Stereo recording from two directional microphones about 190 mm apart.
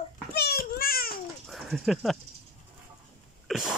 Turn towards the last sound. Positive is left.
turn(degrees=0)  # may be behind; listen again after turning